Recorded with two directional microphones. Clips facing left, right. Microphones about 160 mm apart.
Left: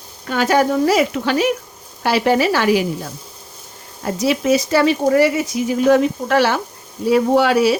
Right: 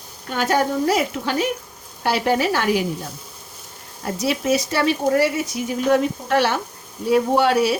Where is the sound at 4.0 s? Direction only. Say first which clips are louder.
Left 4 dB; 90° left.